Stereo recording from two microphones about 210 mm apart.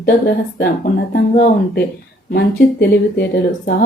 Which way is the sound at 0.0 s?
50° left (ahead or behind).